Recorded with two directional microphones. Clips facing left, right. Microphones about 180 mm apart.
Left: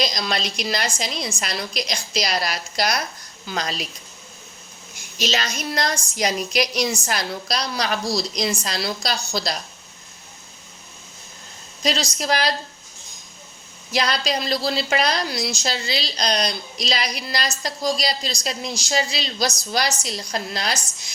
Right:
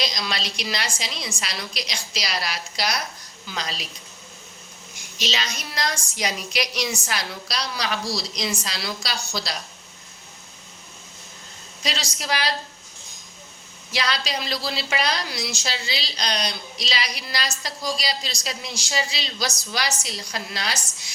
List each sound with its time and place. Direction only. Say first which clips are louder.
0.0 s a woman's voice: left 4 dB; 50° left (ahead or behind)
5.1 s a woman's voice: left 4 dB; 45° left (ahead or behind)
11.8 s a woman's voice: left 7 dB; 45° left (ahead or behind)
13.9 s a woman's voice: left 4 dB; 45° left (ahead or behind)